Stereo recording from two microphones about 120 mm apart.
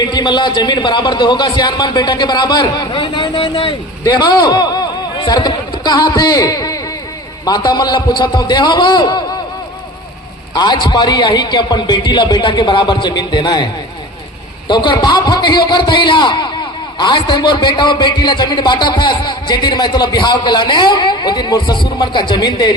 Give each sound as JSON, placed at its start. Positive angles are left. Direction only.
{"t": 0.0, "sound": "a man's voice", "side_deg": 35}
{"t": 4.0, "sound": "a man's voice", "side_deg": 35}
{"t": 10.5, "sound": "a man's voice", "side_deg": 35}
{"t": 14.7, "sound": "a man's voice", "side_deg": 40}